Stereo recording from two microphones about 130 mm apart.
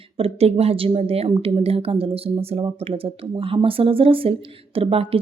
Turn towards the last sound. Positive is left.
turn(degrees=-45)  # may be behind; listen again after turning